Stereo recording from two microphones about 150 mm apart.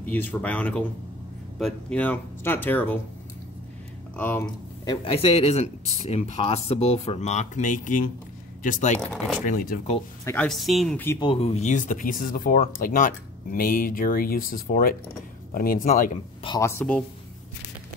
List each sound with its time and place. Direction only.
0.0 s speech: 10° left (ahead or behind)
4.2 s speech: 15° left (ahead or behind)
4.8 s speech: 40° left (ahead or behind); by 9.8 s 70° left (ahead or behind)
10.2 s speech: 10° left (ahead or behind)
11.1 s speech: 35° left (ahead or behind); by 16.1 s 65° left (ahead or behind)
16.4 s speech: 20° left (ahead or behind)